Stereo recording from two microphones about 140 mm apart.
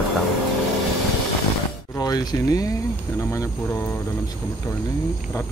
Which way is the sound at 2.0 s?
30° left (ahead or behind).